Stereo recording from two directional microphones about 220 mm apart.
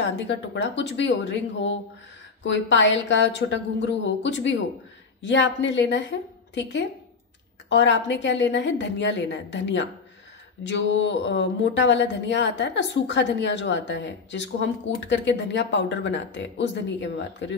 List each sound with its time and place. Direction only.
0.0 s a woman's voice: 55° left (ahead or behind)